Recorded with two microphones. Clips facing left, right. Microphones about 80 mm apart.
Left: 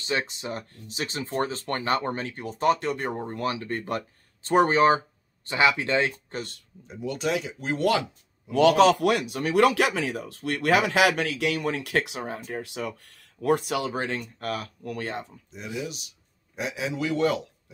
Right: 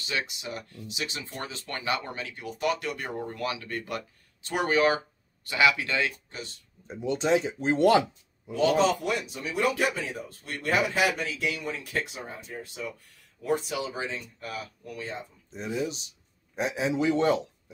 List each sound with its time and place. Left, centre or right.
0.0 s speech: left
6.3 s speech: left
7.0 s speech: right
8.5 s speech: left
16.5 s a man's voice: right